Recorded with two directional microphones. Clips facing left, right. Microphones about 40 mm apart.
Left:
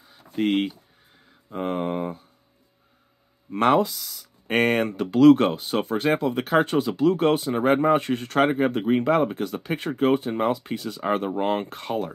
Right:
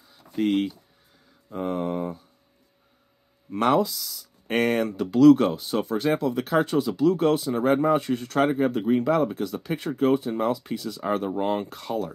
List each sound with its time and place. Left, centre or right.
0.0 s a sound: left
0.4 s speech: left
3.6 s speech: left